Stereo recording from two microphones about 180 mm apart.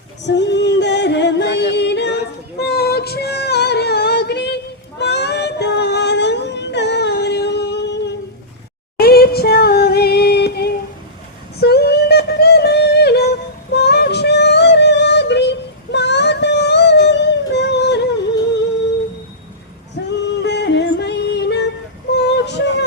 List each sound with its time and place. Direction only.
0.3 s yodeling: 75° left (ahead or behind)
2.6 s female singing: 65° left (ahead or behind)
9.0 s a sound: 60° left (ahead or behind)
13.7 s yodeling: 65° left (ahead or behind)
20.0 s female singing: 70° left (ahead or behind)
20.4 s yodeling: 70° left (ahead or behind)
22.2 s synthetic singing: 70° left (ahead or behind)